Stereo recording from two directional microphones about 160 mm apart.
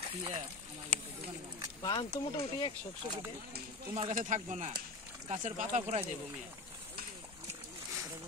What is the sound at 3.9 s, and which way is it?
Speech, 40° right (ahead or behind).